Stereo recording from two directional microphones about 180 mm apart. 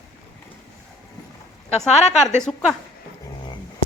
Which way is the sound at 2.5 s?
5° left (ahead or behind).